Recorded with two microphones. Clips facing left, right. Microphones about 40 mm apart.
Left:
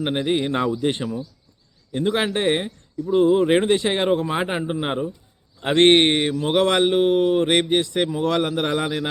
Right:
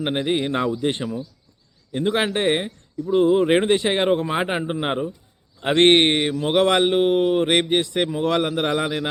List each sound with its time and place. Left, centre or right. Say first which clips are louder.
0.0 s speech: even; centre
0.6 s speech: left 1 dB; centre
1.9 s speech: even; centre
5.5 s speech: even; centre